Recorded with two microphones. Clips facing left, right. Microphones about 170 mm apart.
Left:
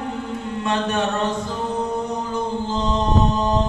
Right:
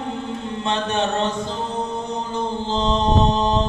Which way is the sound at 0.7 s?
25° right (ahead or behind).